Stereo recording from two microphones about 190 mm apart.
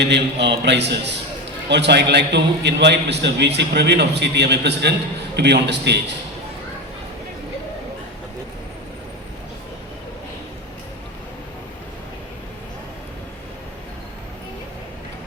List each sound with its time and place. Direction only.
0.0 s a man's voice: 65° right (ahead or behind)